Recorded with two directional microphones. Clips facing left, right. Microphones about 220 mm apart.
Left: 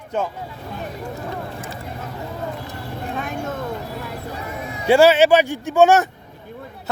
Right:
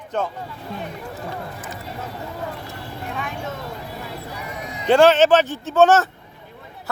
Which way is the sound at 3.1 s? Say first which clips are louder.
Left 3 dB; 45° left (ahead or behind).